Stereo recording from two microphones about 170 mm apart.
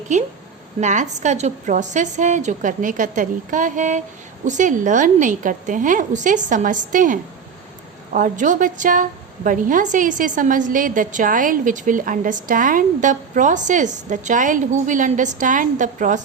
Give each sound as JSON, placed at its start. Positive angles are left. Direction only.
{"t": 0.1, "sound": "a woman's voice", "side_deg": -45}